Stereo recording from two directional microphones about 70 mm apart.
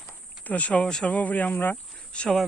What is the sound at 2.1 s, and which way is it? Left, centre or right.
Speech, centre.